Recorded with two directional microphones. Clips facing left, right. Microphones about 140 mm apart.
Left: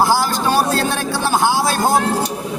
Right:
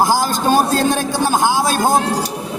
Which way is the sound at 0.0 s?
15° right (ahead or behind).